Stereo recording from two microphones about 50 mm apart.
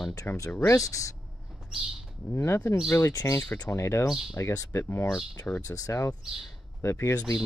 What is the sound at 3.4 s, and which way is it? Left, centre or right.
Speech, left.